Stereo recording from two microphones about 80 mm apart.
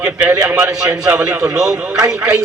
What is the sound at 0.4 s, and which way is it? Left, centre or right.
A man's voice, centre.